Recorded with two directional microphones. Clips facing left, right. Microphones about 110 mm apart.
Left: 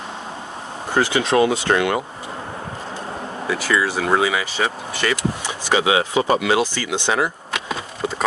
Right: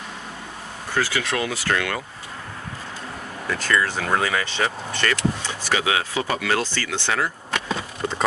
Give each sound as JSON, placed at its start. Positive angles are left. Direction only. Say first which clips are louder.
{"t": 0.9, "sound": "speech", "louder": "left 6 dB", "side_deg": 20}
{"t": 3.4, "sound": "speech", "louder": "left 2 dB", "side_deg": 10}